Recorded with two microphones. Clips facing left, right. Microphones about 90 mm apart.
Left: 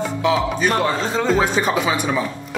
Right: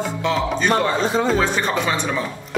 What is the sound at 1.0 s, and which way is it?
Speech, 15° right (ahead or behind).